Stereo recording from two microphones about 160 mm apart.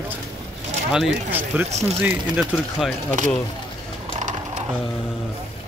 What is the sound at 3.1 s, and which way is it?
Speech, 55° right (ahead or behind).